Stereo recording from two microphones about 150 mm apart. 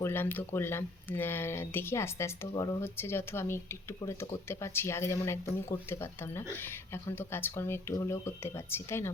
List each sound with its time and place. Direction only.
0.0 s speech: 15° left (ahead or behind)